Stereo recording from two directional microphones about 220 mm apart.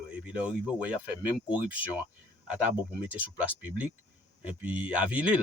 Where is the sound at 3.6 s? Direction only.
5° right (ahead or behind).